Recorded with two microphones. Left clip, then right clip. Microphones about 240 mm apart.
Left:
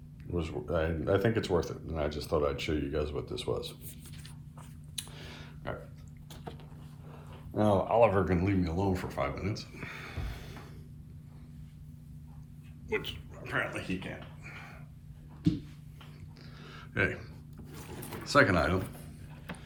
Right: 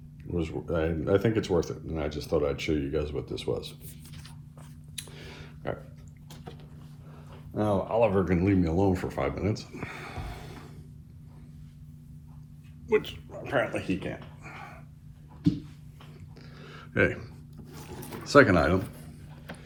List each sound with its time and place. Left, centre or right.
0.3 s speech: centre
4.9 s a sound: centre
7.5 s speech: left
8.4 s speech: centre
12.9 s speech: centre
14.4 s a sound: centre
16.6 s a sound: centre
17.7 s boat: centre
18.2 s speech: centre